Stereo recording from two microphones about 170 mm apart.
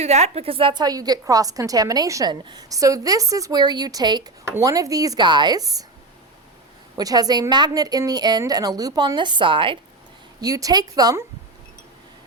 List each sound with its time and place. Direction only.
0.0 s a woman's voice: 40° right (ahead or behind); by 5.8 s 20° right (ahead or behind)
6.9 s a woman's voice: 20° right (ahead or behind)